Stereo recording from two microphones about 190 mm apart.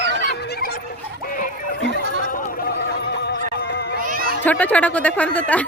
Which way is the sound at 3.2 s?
60° left (ahead or behind).